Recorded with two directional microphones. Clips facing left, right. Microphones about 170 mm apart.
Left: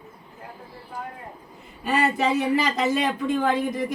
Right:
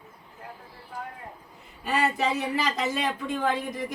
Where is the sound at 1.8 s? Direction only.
65° left (ahead or behind).